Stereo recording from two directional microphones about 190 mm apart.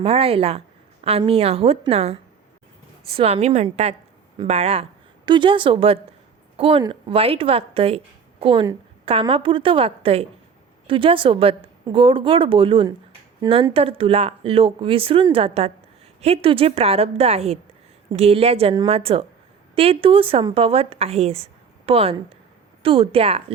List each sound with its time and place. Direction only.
0.0 s a woman's voice: 30° right (ahead or behind)